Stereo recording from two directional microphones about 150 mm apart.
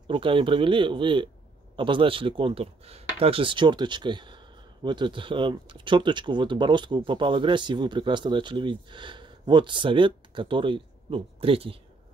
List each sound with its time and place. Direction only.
0.1 s speech: 35° right (ahead or behind)